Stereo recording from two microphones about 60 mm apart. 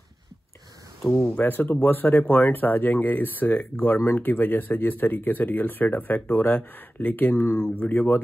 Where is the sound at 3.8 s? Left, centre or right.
Left.